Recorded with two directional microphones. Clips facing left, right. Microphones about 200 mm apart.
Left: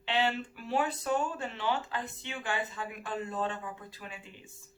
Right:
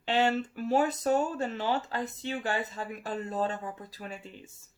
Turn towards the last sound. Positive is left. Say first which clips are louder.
# right 5 dB
turn(degrees=-40)  # may be behind; listen again after turning